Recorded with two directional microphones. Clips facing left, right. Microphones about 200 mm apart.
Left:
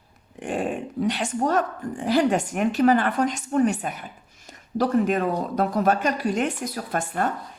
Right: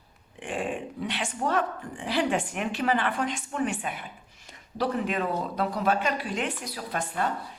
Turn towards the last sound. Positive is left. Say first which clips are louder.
# left 4 dB
turn(degrees=45)  # may be behind; listen again after turning